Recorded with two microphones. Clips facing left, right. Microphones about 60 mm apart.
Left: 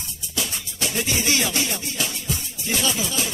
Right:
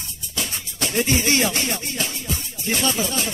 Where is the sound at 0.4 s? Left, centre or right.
Right.